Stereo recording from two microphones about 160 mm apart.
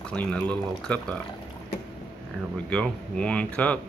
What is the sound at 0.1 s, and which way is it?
Speech, 5° left (ahead or behind).